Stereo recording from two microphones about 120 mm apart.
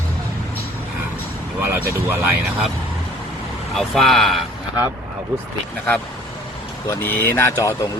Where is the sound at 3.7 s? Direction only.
Centre (ahead or behind).